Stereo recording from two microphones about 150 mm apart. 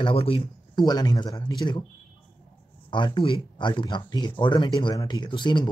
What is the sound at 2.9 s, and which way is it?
Speech, 35° left (ahead or behind).